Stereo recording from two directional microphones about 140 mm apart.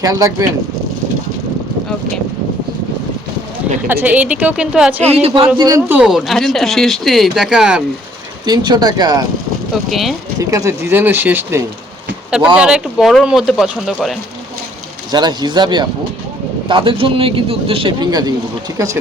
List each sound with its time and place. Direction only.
0.0 s speech: 25° right (ahead or behind)
3.8 s a woman's voice: 15° right (ahead or behind)
5.1 s a man's voice: 45° right (ahead or behind)
5.5 s speech: 25° right (ahead or behind)
5.9 s speech: 5° right (ahead or behind)
8.4 s speech: 30° right (ahead or behind)
9.9 s speech: centre (ahead or behind)
10.4 s a woman's voice: 20° right (ahead or behind); by 14.2 s centre (ahead or behind)
15.1 s a man's voice: 30° right (ahead or behind)